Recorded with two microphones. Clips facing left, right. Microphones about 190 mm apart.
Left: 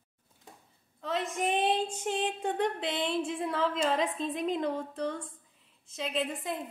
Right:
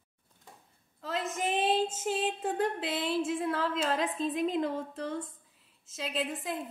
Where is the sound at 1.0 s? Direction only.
Centre (ahead or behind).